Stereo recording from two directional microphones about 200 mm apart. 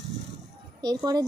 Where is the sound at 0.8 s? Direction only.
20° right (ahead or behind).